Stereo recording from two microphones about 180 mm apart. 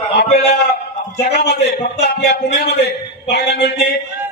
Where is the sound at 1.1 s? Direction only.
65° left (ahead or behind).